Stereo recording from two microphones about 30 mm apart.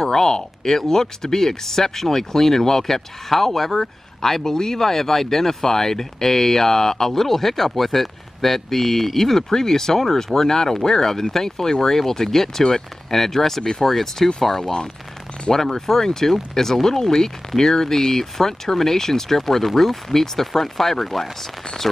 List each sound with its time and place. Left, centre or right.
0.0 s speech: centre
14.6 s speech: left